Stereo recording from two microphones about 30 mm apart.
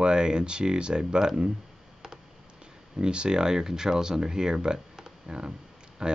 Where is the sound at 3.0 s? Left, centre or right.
Right.